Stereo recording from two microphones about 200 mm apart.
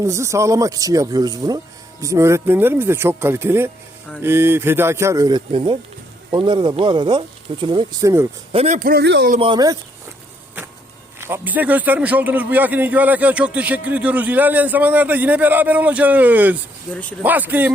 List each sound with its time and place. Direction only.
0.0 s a man's voice: 15° right (ahead or behind)
8.5 s a man's voice: 35° right (ahead or behind)
8.9 s speech: 55° right (ahead or behind)
9.4 s speech: 20° right (ahead or behind)
11.2 s a man's voice: 10° right (ahead or behind)
16.9 s speech: 5° left (ahead or behind)
17.2 s a man's voice: 10° right (ahead or behind)